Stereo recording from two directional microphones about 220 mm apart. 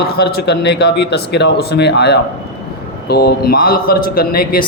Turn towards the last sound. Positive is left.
turn(degrees=45)  # may be behind; listen again after turning